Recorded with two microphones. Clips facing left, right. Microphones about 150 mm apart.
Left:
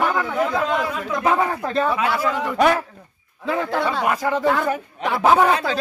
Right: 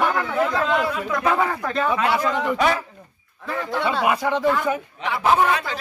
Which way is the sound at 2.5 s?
50° left (ahead or behind).